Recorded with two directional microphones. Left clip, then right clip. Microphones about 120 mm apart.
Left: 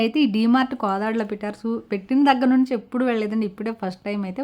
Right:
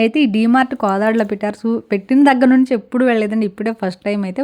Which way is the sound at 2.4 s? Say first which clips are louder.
Right 6 dB; 40° right (ahead or behind).